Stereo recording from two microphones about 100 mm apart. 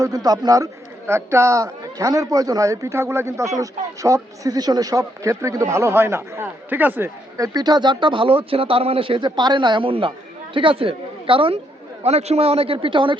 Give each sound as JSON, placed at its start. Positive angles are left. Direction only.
{"t": 0.0, "sound": "speech", "side_deg": -40}
{"t": 1.0, "sound": "a man's voice", "side_deg": -25}
{"t": 7.3, "sound": "speech", "side_deg": -40}
{"t": 12.0, "sound": "a man's voice", "side_deg": -90}